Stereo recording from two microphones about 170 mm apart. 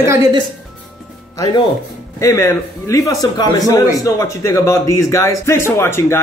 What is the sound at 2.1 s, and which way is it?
A man's voice, 15° left (ahead or behind).